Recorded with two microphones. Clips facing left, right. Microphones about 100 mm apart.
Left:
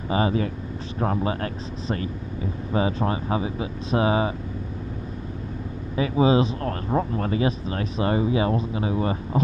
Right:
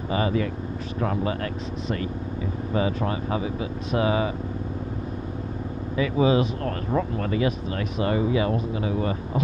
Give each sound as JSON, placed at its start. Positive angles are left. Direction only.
{"t": 0.1, "sound": "speech", "side_deg": 30}
{"t": 5.9, "sound": "speech", "side_deg": 30}